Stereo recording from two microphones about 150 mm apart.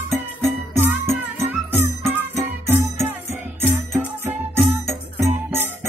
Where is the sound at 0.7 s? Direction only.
15° right (ahead or behind).